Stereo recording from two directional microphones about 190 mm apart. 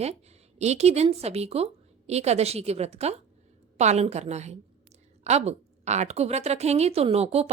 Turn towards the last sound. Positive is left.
turn(degrees=-30)  # may be behind; listen again after turning